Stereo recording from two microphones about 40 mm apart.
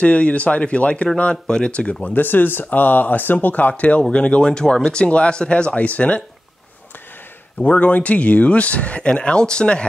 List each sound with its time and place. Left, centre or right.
0.0 s speech: left
2.2 s speech: left
4.1 s speech: left
7.6 s speech: left